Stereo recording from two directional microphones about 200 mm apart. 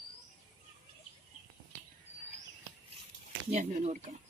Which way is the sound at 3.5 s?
35° right (ahead or behind).